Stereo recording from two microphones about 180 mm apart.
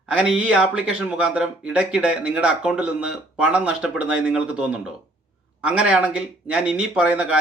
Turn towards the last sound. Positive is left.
turn(degrees=-5)  # may be behind; listen again after turning